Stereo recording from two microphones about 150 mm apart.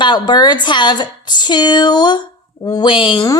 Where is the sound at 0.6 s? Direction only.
30° left (ahead or behind).